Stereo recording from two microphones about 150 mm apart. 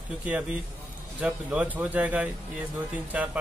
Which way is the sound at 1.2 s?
5° right (ahead or behind).